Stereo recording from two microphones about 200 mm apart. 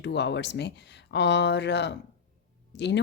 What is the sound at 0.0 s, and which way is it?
A woman's voice, 60° left (ahead or behind).